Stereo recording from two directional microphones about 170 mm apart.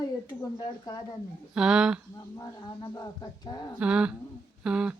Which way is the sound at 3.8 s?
5° right (ahead or behind).